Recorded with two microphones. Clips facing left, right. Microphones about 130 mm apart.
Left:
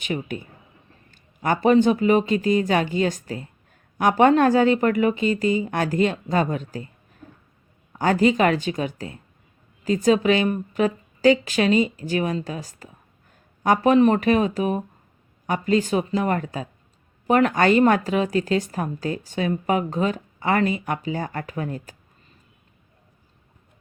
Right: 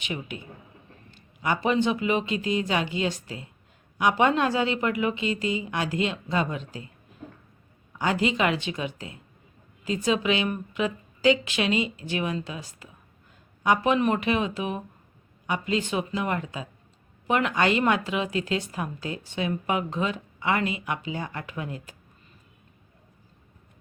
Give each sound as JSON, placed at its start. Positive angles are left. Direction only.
{"t": 0.0, "sound": "a woman's voice", "side_deg": 45}
{"t": 7.9, "sound": "a woman's voice", "side_deg": 45}